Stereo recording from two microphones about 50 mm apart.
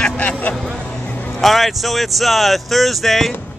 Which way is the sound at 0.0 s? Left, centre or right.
Centre.